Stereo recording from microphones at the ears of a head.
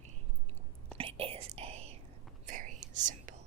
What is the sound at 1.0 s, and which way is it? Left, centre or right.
Whispering, right.